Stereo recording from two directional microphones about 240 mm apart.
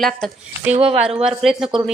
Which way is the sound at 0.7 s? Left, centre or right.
Right.